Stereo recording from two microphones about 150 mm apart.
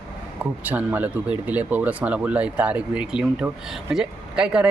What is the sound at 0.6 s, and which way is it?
Speech, 10° right (ahead or behind).